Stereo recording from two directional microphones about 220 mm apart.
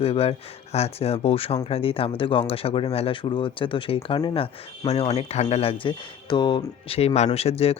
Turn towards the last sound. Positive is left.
turn(degrees=25)  # may be behind; listen again after turning